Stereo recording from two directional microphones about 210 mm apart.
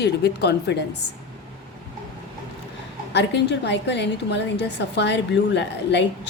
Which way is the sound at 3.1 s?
55° left (ahead or behind).